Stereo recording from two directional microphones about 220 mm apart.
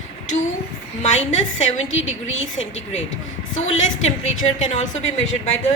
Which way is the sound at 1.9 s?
60° left (ahead or behind).